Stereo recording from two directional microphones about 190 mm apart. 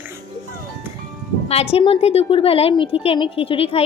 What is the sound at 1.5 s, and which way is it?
A woman's voice, 35° left (ahead or behind).